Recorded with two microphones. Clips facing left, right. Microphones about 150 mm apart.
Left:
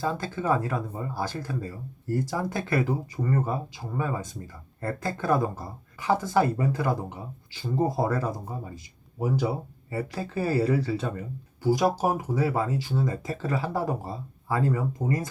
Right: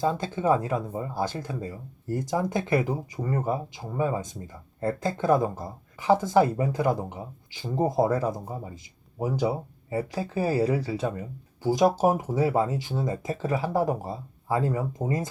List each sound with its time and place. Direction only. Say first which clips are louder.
0.0 s speech: right 3 dB; 20° right (ahead or behind)